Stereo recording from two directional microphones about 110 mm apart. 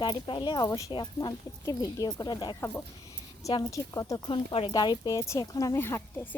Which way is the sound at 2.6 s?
20° left (ahead or behind).